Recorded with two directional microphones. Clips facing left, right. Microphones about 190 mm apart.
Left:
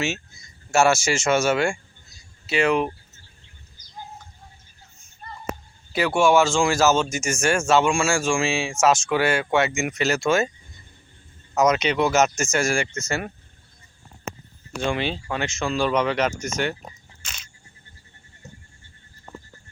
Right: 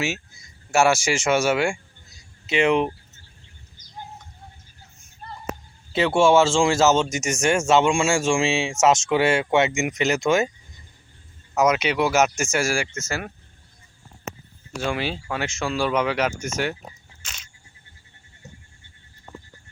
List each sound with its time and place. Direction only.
0.0 s speech: 10° right (ahead or behind)
3.8 s bird: 25° right (ahead or behind)
5.9 s speech: 25° right (ahead or behind)
11.5 s speech: 10° right (ahead or behind)
14.8 s speech: 5° right (ahead or behind)